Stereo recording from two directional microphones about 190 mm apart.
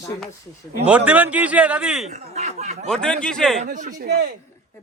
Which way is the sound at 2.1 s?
40° right (ahead or behind).